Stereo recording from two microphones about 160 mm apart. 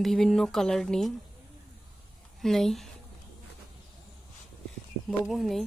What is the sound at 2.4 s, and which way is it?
Speech, centre (ahead or behind).